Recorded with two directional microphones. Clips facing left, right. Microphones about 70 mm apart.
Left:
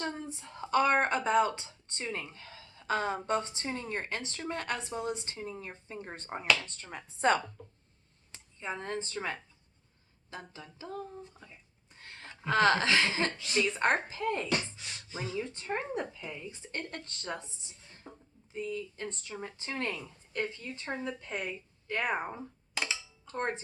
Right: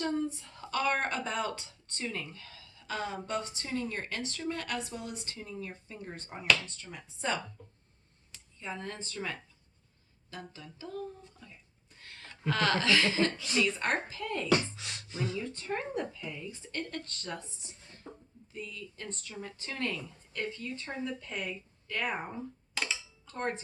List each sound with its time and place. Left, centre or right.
0.0 s speech: left
8.3 s speech: left
15.5 s speech: left
18.0 s speech: centre
18.5 s speech: left
22.7 s music: centre
23.2 s music: left